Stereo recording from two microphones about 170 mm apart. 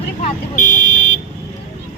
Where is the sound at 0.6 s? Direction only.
50° left (ahead or behind).